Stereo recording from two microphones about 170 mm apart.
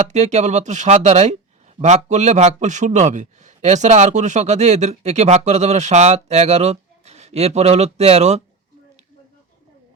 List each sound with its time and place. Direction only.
0.1 s a man's voice: 40° right (ahead or behind)